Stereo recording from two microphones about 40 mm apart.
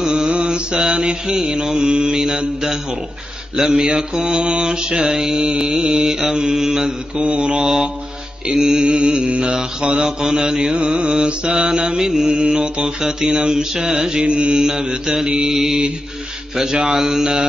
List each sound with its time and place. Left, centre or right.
0.0 s mantra: centre
7.2 s mantra: right
10.8 s mantra: right
13.0 s mantra: centre
15.5 s mantra: centre